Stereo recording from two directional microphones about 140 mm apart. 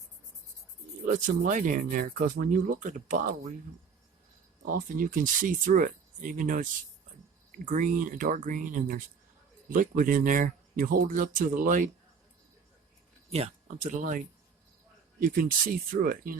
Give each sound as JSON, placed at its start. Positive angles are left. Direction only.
{"t": 1.0, "sound": "speech", "side_deg": -70}
{"t": 4.6, "sound": "speech", "side_deg": -90}
{"t": 13.3, "sound": "speech", "side_deg": -50}
{"t": 15.2, "sound": "speech", "side_deg": -80}